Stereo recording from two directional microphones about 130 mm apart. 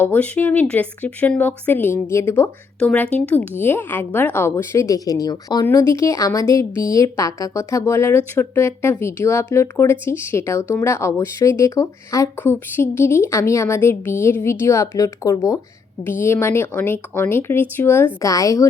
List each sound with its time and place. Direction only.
0.0 s a woman's voice: 15° left (ahead or behind)